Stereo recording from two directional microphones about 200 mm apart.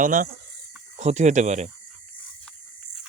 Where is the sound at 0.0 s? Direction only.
40° right (ahead or behind).